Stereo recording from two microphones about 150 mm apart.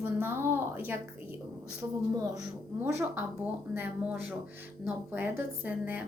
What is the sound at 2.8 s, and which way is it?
Speech, 15° right (ahead or behind).